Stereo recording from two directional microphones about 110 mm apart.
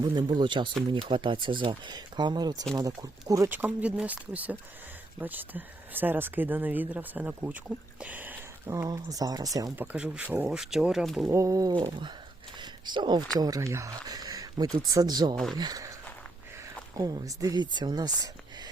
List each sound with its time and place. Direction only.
0.0 s speech: 45° right (ahead or behind)
3.5 s speech: 15° right (ahead or behind)
8.7 s speech: 30° right (ahead or behind)
9.7 s speech: 15° right (ahead or behind)
11.3 s speech: 30° right (ahead or behind)
13.4 s speech: 30° right (ahead or behind)
17.0 s speech: 35° right (ahead or behind)